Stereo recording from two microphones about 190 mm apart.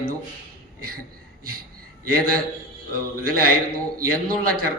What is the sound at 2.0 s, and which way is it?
A man's voice, 50° right (ahead or behind).